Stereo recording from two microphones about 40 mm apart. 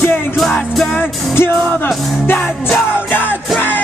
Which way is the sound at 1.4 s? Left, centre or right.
Left.